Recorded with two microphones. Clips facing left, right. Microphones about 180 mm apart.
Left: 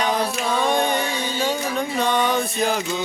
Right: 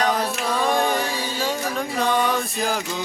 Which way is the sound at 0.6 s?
Centre (ahead or behind).